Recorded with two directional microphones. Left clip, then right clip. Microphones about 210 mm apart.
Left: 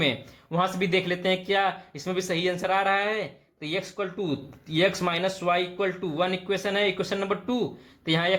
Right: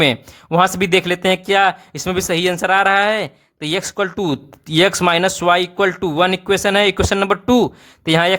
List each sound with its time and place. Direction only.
0.0 s speech: 35° right (ahead or behind)